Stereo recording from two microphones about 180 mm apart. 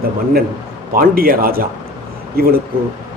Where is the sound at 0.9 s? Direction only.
55° right (ahead or behind).